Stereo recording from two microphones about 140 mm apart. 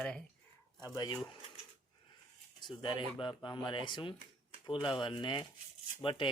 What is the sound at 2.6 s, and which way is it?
Speech, 35° left (ahead or behind).